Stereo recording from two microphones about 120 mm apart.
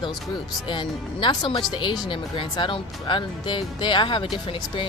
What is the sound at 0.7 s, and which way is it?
Speech, 40° left (ahead or behind).